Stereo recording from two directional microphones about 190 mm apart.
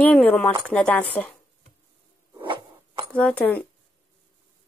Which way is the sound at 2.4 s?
25° right (ahead or behind).